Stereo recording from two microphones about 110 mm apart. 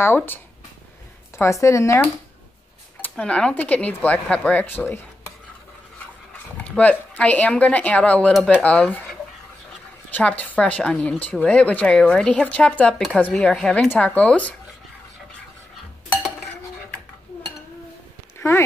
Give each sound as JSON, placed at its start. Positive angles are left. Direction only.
{"t": 0.0, "sound": "speech", "side_deg": 20}
{"t": 1.4, "sound": "speech", "side_deg": 30}
{"t": 3.0, "sound": "speech", "side_deg": 10}
{"t": 6.3, "sound": "speech", "side_deg": 15}
{"t": 10.1, "sound": "speech", "side_deg": 15}
{"t": 16.1, "sound": "cutlery", "side_deg": 10}